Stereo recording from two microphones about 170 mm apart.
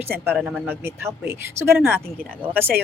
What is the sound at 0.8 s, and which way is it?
Speech, 15° right (ahead or behind).